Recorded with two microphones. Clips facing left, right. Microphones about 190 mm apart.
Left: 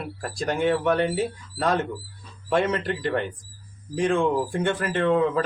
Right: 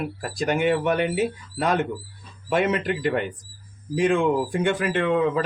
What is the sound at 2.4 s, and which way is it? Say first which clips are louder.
Speech: right 1 dB; 20° right (ahead or behind).